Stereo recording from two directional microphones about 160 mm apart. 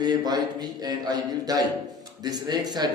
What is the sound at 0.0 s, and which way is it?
A man's voice, 25° right (ahead or behind).